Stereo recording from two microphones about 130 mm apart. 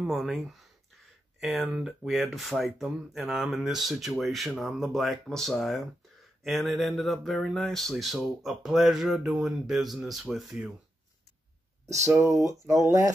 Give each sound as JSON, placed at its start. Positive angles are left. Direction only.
{"t": 0.0, "sound": "speech", "side_deg": 0}
{"t": 12.1, "sound": "speech", "side_deg": -20}